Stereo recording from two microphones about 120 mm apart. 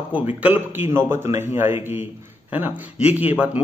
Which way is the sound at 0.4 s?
15° right (ahead or behind).